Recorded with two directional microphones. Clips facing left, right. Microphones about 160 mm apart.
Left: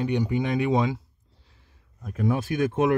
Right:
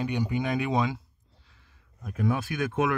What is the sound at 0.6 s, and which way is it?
Speech, 25° left (ahead or behind).